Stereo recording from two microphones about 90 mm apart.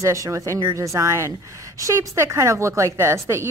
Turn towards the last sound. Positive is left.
turn(degrees=-30)  # may be behind; listen again after turning